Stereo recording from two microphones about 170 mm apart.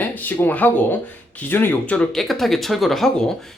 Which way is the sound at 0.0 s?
10° left (ahead or behind).